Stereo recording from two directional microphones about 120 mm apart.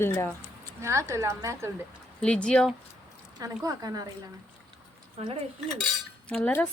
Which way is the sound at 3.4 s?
30° right (ahead or behind).